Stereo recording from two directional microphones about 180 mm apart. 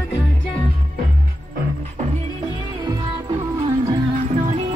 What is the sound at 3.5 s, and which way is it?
Music, 25° right (ahead or behind).